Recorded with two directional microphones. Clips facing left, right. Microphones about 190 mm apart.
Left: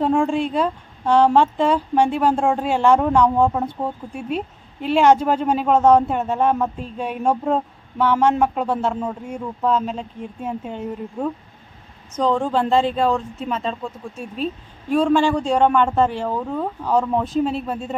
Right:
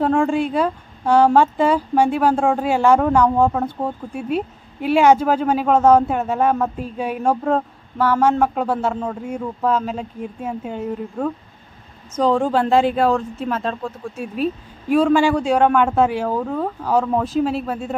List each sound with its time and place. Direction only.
0.0 s speech: centre (ahead or behind)